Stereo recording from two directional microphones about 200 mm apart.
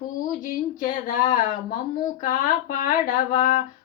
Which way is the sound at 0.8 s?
40° left (ahead or behind).